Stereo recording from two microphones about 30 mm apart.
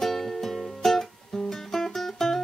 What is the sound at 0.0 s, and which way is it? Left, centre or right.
Music, centre.